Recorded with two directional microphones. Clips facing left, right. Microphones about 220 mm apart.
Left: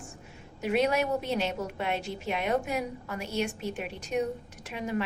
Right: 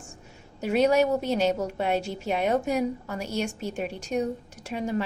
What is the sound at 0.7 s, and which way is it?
A woman's voice, 35° right (ahead or behind).